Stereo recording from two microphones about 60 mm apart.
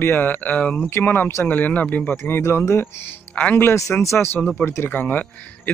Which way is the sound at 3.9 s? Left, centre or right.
Left.